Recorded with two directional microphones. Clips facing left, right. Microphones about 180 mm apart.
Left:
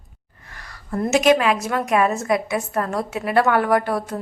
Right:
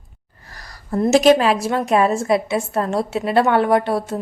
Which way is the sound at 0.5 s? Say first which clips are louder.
Right 3 dB; 35° right (ahead or behind).